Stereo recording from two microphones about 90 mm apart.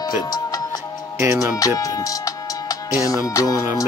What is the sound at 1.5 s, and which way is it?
Speech, 40° left (ahead or behind).